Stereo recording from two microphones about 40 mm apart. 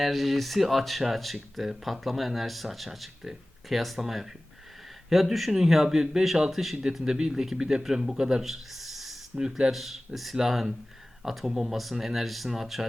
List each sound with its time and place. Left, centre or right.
0.0 s speech: centre
9.3 s speech: centre
9.7 s speech: centre